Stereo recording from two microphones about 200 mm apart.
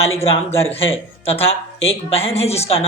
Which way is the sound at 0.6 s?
30° left (ahead or behind).